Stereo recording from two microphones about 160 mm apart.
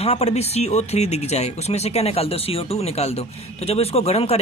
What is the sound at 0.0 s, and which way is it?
Speech, 40° left (ahead or behind).